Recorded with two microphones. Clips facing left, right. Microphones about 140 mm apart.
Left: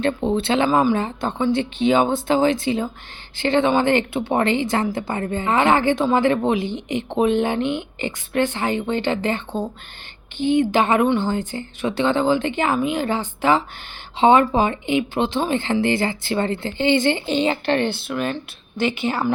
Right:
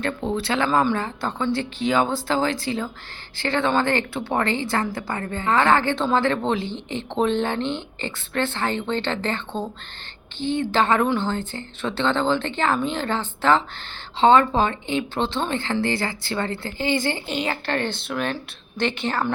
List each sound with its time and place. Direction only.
0.0 s speech: 20° left (ahead or behind)
17.9 s speech: centre (ahead or behind)